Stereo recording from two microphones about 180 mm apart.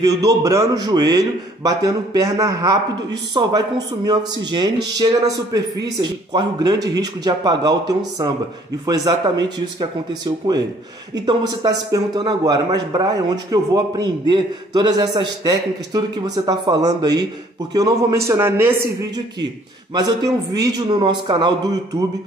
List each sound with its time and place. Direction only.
0.0 s a man's voice: 20° right (ahead or behind)
20.5 s a man's voice: 20° right (ahead or behind)